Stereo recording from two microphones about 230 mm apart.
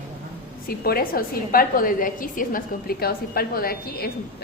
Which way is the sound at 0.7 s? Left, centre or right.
Left.